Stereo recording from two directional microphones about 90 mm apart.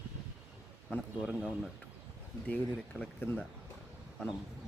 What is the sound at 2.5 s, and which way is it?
Speech, 20° left (ahead or behind).